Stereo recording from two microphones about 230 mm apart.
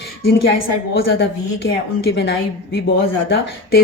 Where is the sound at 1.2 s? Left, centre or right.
Left.